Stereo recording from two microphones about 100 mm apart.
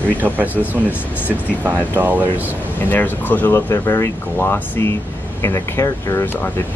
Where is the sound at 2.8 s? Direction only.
20° left (ahead or behind).